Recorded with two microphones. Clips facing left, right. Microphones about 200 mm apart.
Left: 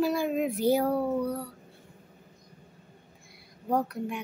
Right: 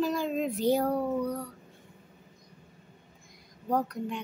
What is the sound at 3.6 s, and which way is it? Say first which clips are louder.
Speech: left 1 dB; 10° left (ahead or behind).